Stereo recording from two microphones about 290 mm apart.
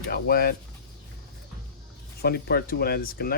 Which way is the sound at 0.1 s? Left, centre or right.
Left.